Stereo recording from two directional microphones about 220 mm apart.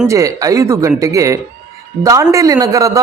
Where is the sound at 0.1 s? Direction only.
15° right (ahead or behind).